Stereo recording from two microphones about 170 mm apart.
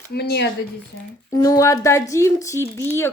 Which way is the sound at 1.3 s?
20° left (ahead or behind).